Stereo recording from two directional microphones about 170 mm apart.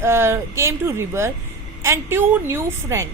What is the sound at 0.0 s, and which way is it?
Speech, 15° right (ahead or behind).